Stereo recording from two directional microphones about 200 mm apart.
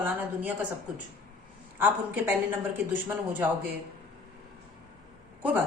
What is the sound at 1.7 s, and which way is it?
Speech, 10° right (ahead or behind).